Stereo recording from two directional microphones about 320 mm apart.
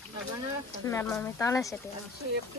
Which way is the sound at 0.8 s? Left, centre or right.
Centre.